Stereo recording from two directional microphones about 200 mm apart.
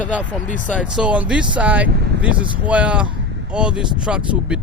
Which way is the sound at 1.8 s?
55° right (ahead or behind).